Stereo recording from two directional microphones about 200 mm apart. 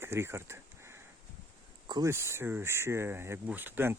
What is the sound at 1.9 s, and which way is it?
Speech, 15° right (ahead or behind).